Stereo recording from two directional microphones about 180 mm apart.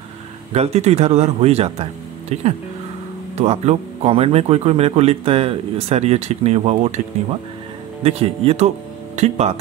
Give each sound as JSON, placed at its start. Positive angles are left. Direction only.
{"t": 0.5, "sound": "speech", "side_deg": -35}
{"t": 3.3, "sound": "speech", "side_deg": -35}
{"t": 8.0, "sound": "speech", "side_deg": -35}